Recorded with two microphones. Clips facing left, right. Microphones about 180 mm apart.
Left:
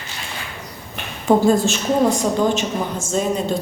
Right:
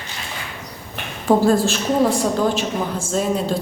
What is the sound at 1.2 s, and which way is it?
A woman's voice, centre (ahead or behind).